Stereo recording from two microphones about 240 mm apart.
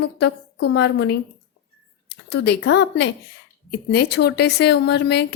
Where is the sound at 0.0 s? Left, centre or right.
Left.